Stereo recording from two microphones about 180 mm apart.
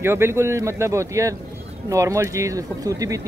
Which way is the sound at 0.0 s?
15° right (ahead or behind).